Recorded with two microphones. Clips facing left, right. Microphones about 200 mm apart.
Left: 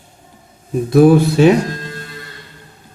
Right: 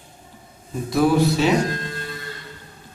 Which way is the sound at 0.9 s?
55° left (ahead or behind).